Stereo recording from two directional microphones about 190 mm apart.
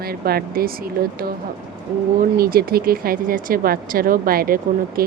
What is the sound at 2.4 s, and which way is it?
Speech, 50° right (ahead or behind).